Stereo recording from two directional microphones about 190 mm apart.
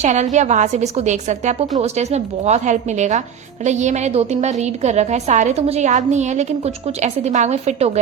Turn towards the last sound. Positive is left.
turn(degrees=-35)  # may be behind; listen again after turning